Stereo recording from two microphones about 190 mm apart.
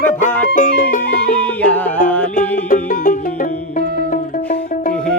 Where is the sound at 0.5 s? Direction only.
45° left (ahead or behind).